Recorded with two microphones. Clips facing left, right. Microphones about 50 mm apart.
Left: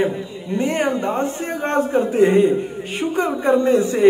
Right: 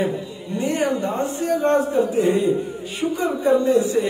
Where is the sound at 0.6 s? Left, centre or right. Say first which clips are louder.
Left 1 dB; left.